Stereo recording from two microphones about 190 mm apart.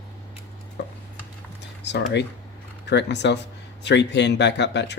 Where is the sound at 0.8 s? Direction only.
65° left (ahead or behind).